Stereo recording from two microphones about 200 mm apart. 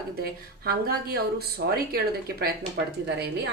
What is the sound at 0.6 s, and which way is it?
A woman's voice, 50° right (ahead or behind).